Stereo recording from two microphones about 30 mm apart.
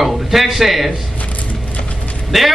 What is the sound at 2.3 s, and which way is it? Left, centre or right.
Speech, centre.